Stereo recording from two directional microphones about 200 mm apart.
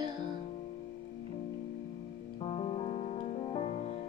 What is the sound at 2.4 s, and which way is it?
Music, 30° left (ahead or behind).